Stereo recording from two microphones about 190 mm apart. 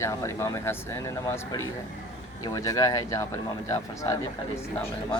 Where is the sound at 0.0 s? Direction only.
15° left (ahead or behind).